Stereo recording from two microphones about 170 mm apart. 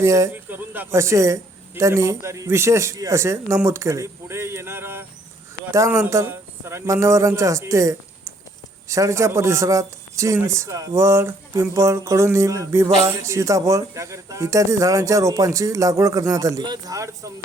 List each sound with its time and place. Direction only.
0.0 s a man's voice: 20° right (ahead or behind)